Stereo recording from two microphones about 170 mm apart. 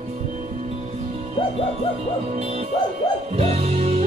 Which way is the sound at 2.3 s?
40° right (ahead or behind).